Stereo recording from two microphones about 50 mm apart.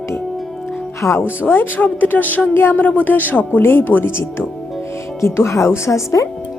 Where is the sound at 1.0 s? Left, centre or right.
Left.